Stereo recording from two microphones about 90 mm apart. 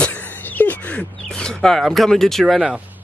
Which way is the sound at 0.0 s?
15° left (ahead or behind).